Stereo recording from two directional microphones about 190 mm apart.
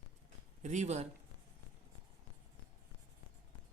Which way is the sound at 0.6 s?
40° right (ahead or behind).